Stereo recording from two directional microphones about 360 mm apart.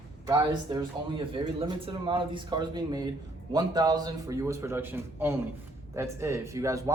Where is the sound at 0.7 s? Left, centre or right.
Centre.